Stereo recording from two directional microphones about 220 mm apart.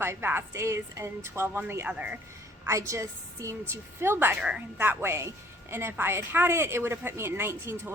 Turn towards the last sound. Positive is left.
turn(degrees=-10)  # may be behind; listen again after turning